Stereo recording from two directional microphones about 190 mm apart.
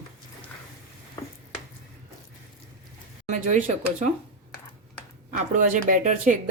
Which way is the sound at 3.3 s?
40° right (ahead or behind).